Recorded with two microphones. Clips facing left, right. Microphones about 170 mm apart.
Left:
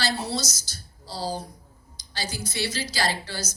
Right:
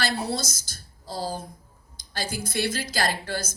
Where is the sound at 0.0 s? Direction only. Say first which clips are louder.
Right 1 dB; 55° right (ahead or behind).